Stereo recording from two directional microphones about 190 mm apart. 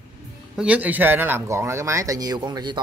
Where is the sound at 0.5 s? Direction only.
5° right (ahead or behind); by 2.8 s 25° right (ahead or behind).